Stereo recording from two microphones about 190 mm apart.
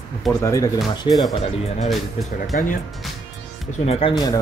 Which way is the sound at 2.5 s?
45° left (ahead or behind).